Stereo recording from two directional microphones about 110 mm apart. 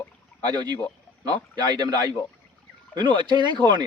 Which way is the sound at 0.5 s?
40° right (ahead or behind).